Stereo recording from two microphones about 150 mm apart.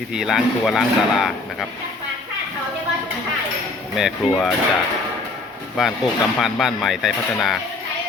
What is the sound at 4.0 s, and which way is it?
Speech, 5° right (ahead or behind).